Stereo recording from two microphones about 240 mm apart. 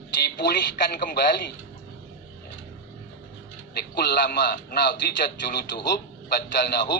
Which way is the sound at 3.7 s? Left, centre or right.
Left.